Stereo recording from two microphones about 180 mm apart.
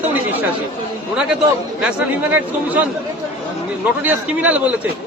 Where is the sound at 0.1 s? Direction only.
10° right (ahead or behind).